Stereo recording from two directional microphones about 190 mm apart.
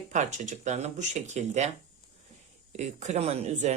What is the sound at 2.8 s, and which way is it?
Speech, 40° right (ahead or behind).